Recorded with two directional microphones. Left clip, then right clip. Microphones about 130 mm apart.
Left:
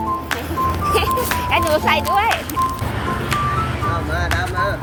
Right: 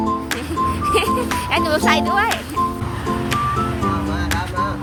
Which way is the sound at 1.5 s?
65° right (ahead or behind).